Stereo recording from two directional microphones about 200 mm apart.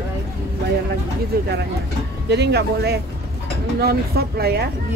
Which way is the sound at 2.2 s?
55° right (ahead or behind).